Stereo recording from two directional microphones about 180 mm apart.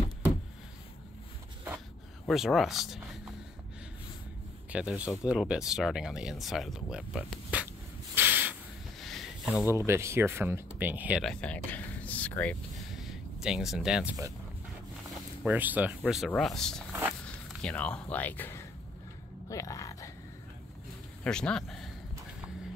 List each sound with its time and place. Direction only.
2.2 s speech: centre (ahead or behind)
4.6 s speech: 5° right (ahead or behind)
8.1 s spray: 10° right (ahead or behind)
9.0 s a sound: centre (ahead or behind)
9.7 s speech: 15° right (ahead or behind)
11.4 s a sound: 10° left (ahead or behind)
15.4 s speech: 10° right (ahead or behind)
16.9 s walk: 10° right (ahead or behind)
17.6 s speech: 5° left (ahead or behind)
19.5 s a sound: 20° left (ahead or behind)
21.2 s speech: 5° left (ahead or behind)